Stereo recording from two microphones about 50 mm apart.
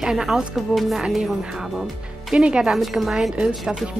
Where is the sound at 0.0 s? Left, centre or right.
Centre.